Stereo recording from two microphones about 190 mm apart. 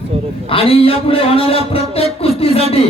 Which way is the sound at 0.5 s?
30° left (ahead or behind).